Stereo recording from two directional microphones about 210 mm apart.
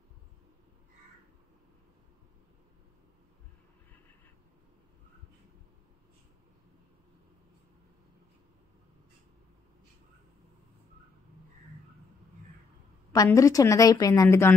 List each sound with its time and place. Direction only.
13.1 s a woman's voice: 15° left (ahead or behind)